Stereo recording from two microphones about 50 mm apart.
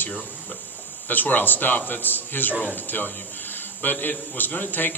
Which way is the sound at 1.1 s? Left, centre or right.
Left.